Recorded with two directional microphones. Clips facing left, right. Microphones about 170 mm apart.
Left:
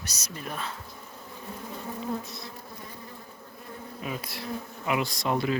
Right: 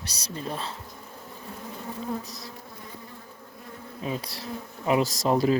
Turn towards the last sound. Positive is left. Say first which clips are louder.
# right 5 dB
turn(degrees=-35)  # may be behind; listen again after turning